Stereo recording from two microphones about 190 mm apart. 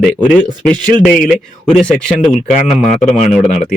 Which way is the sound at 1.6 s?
Centre (ahead or behind).